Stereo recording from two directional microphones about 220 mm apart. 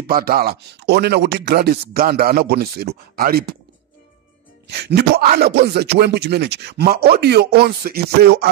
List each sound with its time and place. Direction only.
0.0 s a man's voice: 45° right (ahead or behind)
4.6 s a man's voice: 50° right (ahead or behind)